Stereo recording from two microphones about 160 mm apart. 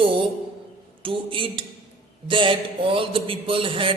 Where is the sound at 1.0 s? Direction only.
30° right (ahead or behind).